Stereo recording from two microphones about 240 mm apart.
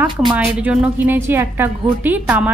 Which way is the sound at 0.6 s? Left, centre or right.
Centre.